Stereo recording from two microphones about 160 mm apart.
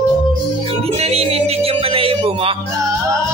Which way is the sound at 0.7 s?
40° right (ahead or behind).